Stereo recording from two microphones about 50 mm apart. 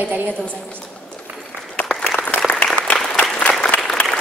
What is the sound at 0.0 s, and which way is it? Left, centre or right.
Speech, right.